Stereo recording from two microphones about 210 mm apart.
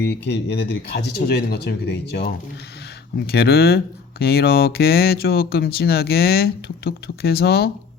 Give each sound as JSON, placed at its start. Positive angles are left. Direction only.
{"t": 0.0, "sound": "speech", "side_deg": 55}